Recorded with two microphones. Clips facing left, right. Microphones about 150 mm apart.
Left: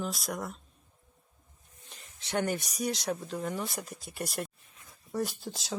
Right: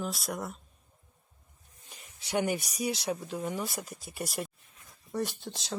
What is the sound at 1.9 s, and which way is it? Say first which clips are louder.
Speech: right 1 dB; 10° right (ahead or behind).